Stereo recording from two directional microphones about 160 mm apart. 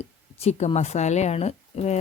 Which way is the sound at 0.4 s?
40° left (ahead or behind).